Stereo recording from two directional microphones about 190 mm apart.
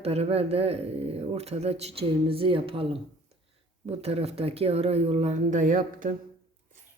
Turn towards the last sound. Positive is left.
turn(degrees=-45)  # may be behind; listen again after turning